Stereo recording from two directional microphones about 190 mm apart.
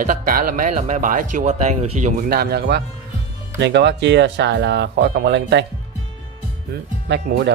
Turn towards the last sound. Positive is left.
turn(degrees=-60)  # may be behind; listen again after turning